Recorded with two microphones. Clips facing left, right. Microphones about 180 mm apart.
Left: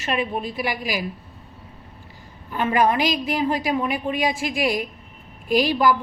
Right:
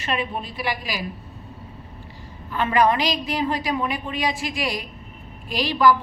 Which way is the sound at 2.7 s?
50° left (ahead or behind).